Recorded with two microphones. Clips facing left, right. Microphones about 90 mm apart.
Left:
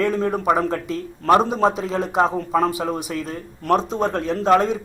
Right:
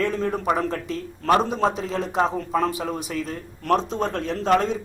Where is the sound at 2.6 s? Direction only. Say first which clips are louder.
Left 3 dB; 5° left (ahead or behind).